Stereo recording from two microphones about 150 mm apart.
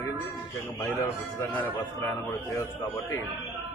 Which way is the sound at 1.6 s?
15° left (ahead or behind).